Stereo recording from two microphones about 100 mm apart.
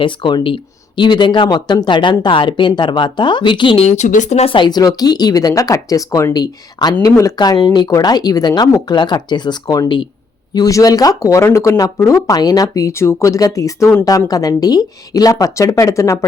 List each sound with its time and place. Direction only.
0.0 s speech: 55° left (ahead or behind); by 16.2 s 30° left (ahead or behind)